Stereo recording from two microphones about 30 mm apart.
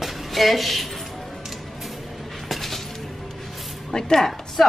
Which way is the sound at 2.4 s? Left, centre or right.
Centre.